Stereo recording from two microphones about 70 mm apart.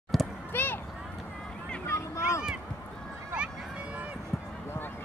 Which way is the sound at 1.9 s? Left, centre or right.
Left.